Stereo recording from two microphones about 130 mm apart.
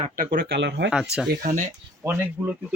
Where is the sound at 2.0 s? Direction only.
20° right (ahead or behind).